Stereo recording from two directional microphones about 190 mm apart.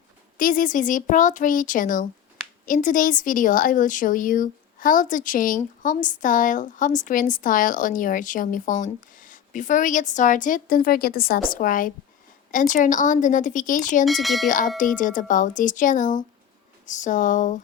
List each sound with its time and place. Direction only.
0.3 s a woman's voice: 45° left (ahead or behind)
14.0 s speech: centre (ahead or behind)
14.4 s a woman's voice: 45° left (ahead or behind)